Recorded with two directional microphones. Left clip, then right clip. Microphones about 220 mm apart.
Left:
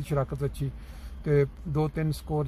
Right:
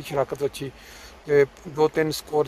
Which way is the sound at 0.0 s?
10° right (ahead or behind).